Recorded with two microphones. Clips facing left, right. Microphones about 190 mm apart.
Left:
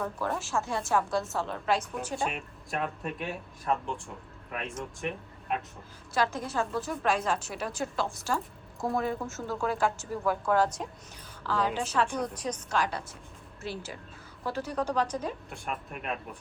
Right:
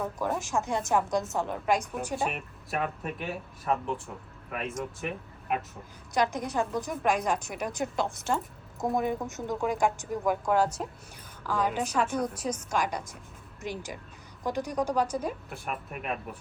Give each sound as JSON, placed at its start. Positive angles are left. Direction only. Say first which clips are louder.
{"t": 0.3, "sound": "a woman's voice", "louder": "right 2 dB", "side_deg": -15}
{"t": 6.1, "sound": "a woman's voice", "louder": "right 2 dB", "side_deg": -15}